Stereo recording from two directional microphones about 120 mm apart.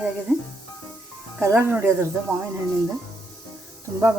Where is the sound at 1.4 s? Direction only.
20° right (ahead or behind).